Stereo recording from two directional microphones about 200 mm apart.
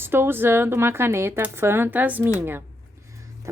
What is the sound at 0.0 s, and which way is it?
A woman's voice, 10° right (ahead or behind).